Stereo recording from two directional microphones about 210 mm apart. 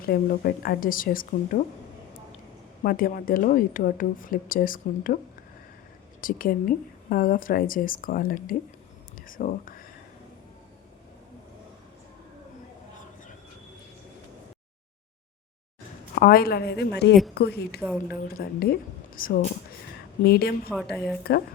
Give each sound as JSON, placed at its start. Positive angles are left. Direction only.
{"t": 0.0, "sound": "a woman's voice", "side_deg": 45}
{"t": 2.8, "sound": "speech", "side_deg": 40}
{"t": 6.2, "sound": "speech", "side_deg": 40}
{"t": 16.1, "sound": "a woman's voice", "side_deg": 45}
{"t": 17.7, "sound": "speech", "side_deg": -10}
{"t": 18.2, "sound": "a woman's voice", "side_deg": 45}
{"t": 20.9, "sound": "speech", "side_deg": 0}